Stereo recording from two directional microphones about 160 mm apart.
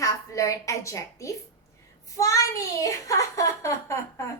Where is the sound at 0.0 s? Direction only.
20° left (ahead or behind).